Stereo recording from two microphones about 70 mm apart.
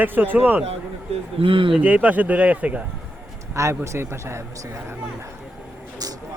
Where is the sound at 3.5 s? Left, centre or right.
Right.